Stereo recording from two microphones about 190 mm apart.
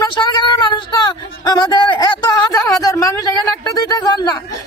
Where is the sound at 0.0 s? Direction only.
25° left (ahead or behind).